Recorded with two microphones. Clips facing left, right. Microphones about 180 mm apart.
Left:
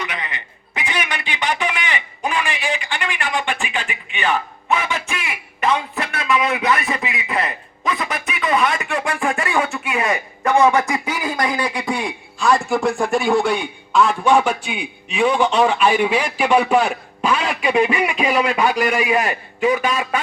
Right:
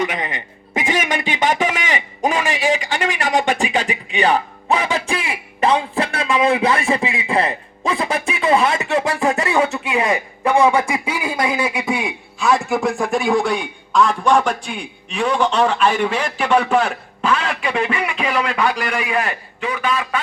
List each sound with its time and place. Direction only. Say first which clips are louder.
0.0 s speech: right 6 dB; 45° right (ahead or behind); by 10.2 s 30° right (ahead or behind)
10.9 s a man's voice: right 1 dB; 10° right (ahead or behind); by 20.1 s 15° left (ahead or behind)